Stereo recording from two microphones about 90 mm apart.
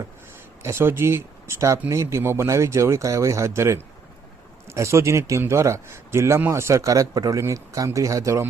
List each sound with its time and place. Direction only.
0.6 s a man's voice: 30° right (ahead or behind)